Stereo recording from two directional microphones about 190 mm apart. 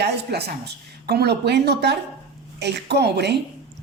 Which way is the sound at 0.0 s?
60° right (ahead or behind).